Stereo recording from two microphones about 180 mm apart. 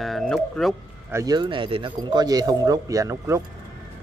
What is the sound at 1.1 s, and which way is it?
Speech, 20° right (ahead or behind).